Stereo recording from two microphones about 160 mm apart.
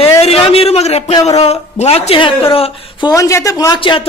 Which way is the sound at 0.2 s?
40° left (ahead or behind).